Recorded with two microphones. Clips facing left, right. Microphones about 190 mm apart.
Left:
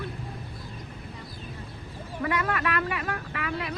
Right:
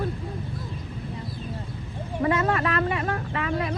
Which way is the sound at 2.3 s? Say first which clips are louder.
Right 4 dB; 25° right (ahead or behind).